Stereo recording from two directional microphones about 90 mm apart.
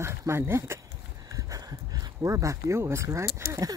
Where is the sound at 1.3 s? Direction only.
40° right (ahead or behind).